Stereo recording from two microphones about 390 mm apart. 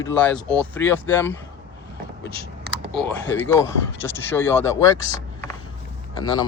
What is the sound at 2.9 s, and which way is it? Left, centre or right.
Speech, centre.